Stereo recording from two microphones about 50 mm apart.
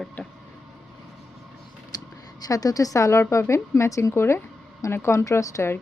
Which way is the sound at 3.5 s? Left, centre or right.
Left.